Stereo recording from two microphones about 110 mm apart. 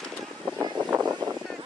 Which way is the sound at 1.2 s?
40° right (ahead or behind).